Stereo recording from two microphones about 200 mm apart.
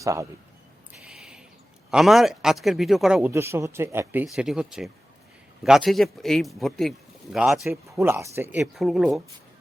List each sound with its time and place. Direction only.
0.0 s a man's voice: 15° right (ahead or behind)
1.0 s a sound: 5° right (ahead or behind)
1.9 s speech: centre (ahead or behind)
7.7 s speech: 15° right (ahead or behind)
8.6 s speech: centre (ahead or behind)